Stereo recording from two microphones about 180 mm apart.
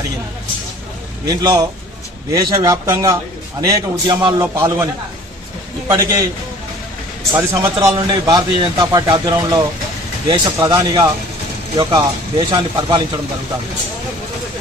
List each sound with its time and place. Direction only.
1.2 s a man's voice: 20° right (ahead or behind)
5.9 s speech: 15° right (ahead or behind)
7.3 s a man's voice: 20° right (ahead or behind)